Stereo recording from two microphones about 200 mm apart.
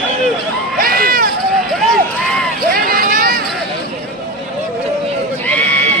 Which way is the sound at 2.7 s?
45° right (ahead or behind).